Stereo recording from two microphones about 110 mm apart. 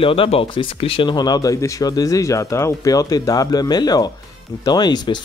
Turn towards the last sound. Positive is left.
turn(degrees=40)  # may be behind; listen again after turning